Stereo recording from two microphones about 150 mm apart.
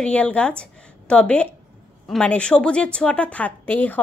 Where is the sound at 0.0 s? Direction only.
10° left (ahead or behind).